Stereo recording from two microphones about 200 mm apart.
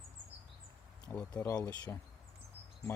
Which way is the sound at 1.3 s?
15° left (ahead or behind).